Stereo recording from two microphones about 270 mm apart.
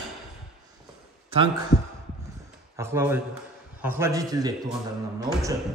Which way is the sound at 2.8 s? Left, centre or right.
Centre.